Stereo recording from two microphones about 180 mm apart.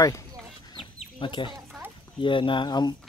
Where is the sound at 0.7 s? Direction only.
25° left (ahead or behind).